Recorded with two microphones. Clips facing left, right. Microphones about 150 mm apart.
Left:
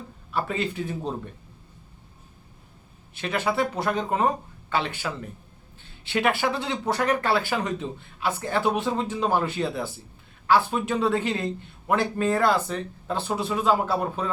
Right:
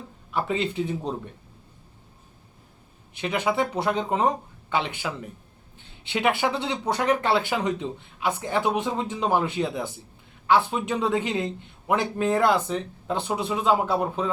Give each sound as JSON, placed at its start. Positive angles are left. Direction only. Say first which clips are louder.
{"t": 0.3, "sound": "speech", "louder": "right 1 dB", "side_deg": -20}
{"t": 3.2, "sound": "speech", "louder": "right 1 dB", "side_deg": -15}